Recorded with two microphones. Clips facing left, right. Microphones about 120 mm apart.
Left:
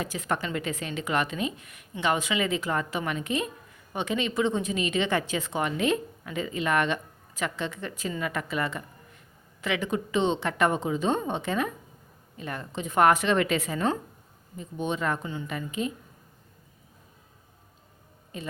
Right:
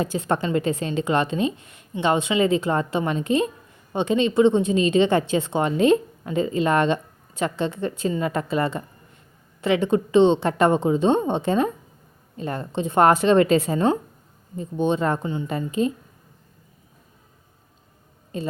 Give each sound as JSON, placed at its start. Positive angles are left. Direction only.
{"t": 0.0, "sound": "a woman's voice", "side_deg": -30}
{"t": 18.3, "sound": "a woman's voice", "side_deg": -30}